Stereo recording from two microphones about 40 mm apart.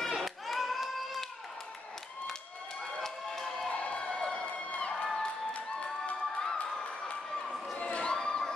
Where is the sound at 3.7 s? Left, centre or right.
Left.